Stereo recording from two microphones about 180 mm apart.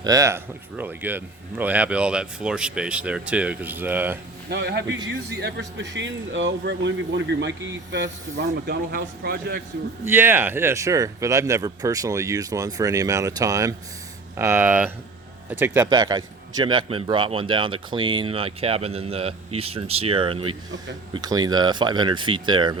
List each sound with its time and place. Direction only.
0.0 s speech: 20° right (ahead or behind)
4.4 s speech: 70° right (ahead or behind)
10.0 s speech: 10° right (ahead or behind)
15.8 s a man's voice: 20° right (ahead or behind)